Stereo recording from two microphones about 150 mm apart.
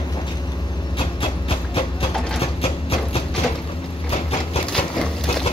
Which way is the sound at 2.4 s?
40° left (ahead or behind).